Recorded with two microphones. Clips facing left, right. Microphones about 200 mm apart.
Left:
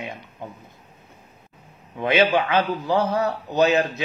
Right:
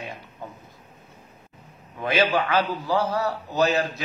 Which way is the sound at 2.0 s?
20° left (ahead or behind).